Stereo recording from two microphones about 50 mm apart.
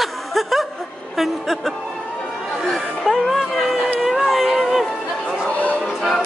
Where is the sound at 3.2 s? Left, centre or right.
Centre.